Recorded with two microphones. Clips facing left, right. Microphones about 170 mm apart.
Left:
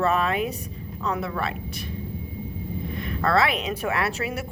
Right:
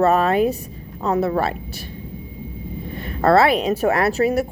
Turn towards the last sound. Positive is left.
turn(degrees=-45)  # may be behind; listen again after turning